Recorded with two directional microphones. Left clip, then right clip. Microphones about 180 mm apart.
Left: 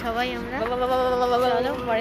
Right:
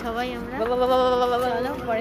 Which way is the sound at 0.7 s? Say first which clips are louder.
Right 3 dB; 85° right.